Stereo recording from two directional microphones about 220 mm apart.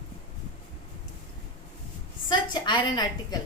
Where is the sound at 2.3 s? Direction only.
20° left (ahead or behind).